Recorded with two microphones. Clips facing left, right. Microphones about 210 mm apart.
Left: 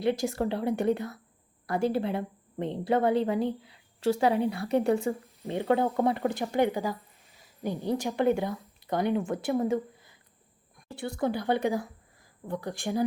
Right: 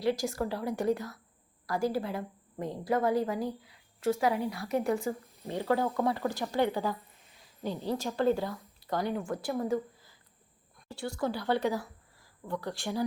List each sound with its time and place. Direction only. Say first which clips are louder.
0.0 s a woman's voice: left 3 dB; 20° left (ahead or behind)
5.4 s a woman's voice: left 3 dB; 15° left (ahead or behind)
10.9 s speech: left 2 dB; 55° left (ahead or behind)
11.2 s a woman's voice: left 3 dB; 20° left (ahead or behind)
11.7 s a sound: left 4 dB; 50° left (ahead or behind)
12.5 s speech: left 2 dB; 15° left (ahead or behind)